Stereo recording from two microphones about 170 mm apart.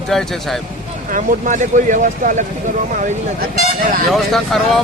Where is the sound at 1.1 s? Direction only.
50° right (ahead or behind).